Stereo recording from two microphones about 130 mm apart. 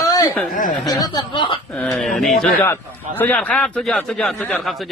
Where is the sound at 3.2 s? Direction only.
10° left (ahead or behind).